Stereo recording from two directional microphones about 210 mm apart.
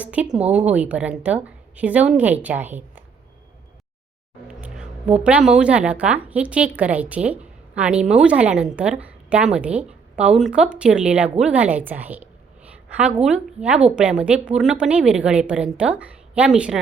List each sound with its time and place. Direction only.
0.0 s a woman's voice: 5° right (ahead or behind)
4.4 s a sound: 5° right (ahead or behind)
5.2 s a woman's voice: 5° right (ahead or behind)